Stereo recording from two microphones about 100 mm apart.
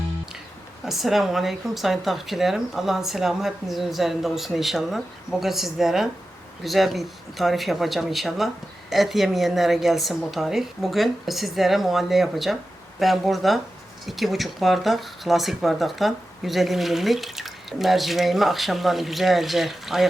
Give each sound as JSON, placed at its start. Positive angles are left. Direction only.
{"t": 0.9, "sound": "speech", "side_deg": 0}